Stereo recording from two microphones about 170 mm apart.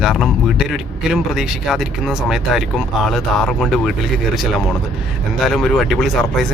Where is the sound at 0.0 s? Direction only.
Centre (ahead or behind).